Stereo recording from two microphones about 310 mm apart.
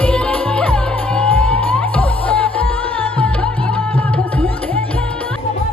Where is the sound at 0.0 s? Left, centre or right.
Centre.